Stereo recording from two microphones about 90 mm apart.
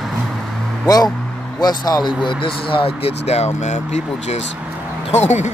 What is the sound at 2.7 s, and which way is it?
Speech, 90° left.